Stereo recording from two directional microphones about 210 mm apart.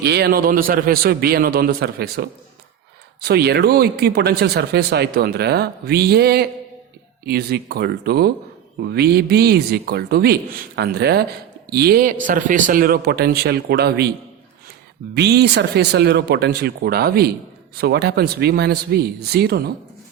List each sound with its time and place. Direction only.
0.0 s speech: 50° right (ahead or behind)
15.1 s speech: 50° right (ahead or behind)